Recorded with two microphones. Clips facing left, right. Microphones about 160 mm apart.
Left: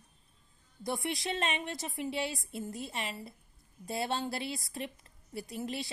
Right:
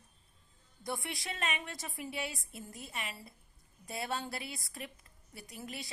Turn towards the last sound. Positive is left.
turn(degrees=30)  # may be behind; listen again after turning